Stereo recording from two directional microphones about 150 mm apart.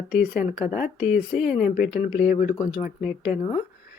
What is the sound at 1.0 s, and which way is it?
Speech, 5° right (ahead or behind).